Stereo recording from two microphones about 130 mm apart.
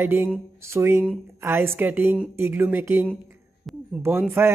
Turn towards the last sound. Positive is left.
turn(degrees=-20)  # may be behind; listen again after turning